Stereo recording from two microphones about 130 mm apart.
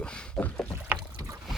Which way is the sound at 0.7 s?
15° right (ahead or behind).